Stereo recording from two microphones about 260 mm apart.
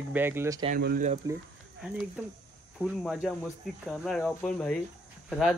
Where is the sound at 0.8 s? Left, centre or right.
Right.